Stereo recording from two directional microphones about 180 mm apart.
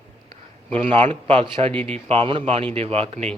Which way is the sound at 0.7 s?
35° right (ahead or behind).